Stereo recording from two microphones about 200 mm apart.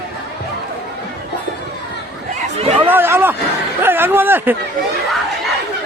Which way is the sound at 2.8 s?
10° right (ahead or behind).